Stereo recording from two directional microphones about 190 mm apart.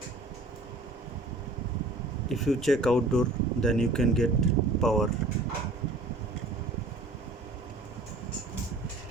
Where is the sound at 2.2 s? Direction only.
Centre (ahead or behind).